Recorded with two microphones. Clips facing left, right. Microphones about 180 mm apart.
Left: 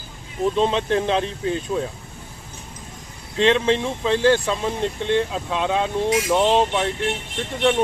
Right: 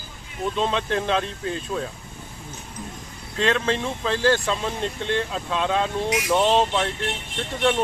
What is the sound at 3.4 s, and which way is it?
Speech, 20° left (ahead or behind).